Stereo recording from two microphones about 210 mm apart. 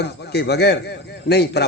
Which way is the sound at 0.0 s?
50° left (ahead or behind).